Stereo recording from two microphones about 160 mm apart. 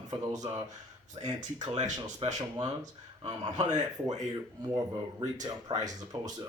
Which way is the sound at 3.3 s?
25° right (ahead or behind).